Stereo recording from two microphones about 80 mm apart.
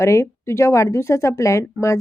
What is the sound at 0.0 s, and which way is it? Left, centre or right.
A woman's voice, left.